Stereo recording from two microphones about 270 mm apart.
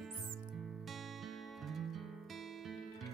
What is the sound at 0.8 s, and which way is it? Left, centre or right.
Music, centre.